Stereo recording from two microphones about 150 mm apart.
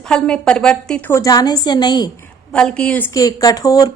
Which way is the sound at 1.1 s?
25° left (ahead or behind).